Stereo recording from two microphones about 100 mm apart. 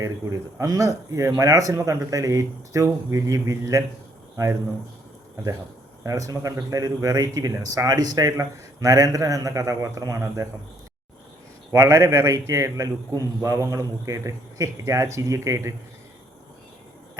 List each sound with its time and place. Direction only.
0.0 s a man's voice: 35° right (ahead or behind)
6.0 s a man's voice: 35° right (ahead or behind)
11.7 s a man's voice: 35° right (ahead or behind)